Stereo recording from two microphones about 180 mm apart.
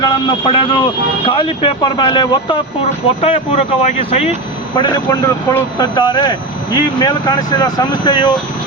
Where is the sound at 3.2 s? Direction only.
35° left (ahead or behind).